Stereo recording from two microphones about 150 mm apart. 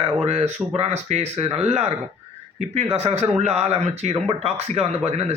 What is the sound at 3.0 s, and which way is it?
Speech, 45° right (ahead or behind).